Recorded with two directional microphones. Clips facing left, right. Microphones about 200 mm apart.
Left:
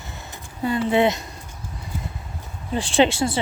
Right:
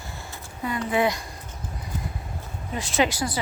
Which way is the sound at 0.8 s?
25° left (ahead or behind).